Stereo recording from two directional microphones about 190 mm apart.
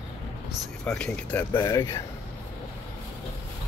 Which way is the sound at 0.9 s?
5° left (ahead or behind).